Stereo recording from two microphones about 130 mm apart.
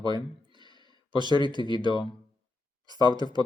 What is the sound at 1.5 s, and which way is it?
Speech, 35° left (ahead or behind).